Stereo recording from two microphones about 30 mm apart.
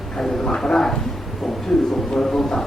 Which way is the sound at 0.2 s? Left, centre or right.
Centre.